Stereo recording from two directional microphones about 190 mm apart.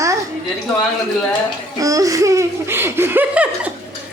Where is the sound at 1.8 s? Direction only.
15° right (ahead or behind).